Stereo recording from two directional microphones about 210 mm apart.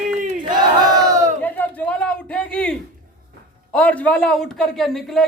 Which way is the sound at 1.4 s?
10° left (ahead or behind).